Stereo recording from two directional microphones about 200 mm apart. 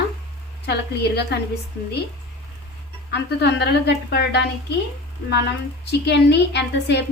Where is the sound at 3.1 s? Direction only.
55° left (ahead or behind).